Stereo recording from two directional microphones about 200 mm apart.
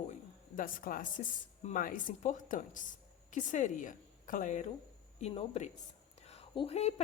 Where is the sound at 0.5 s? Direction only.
45° left (ahead or behind).